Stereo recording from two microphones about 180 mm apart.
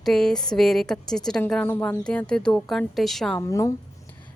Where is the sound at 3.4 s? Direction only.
15° left (ahead or behind).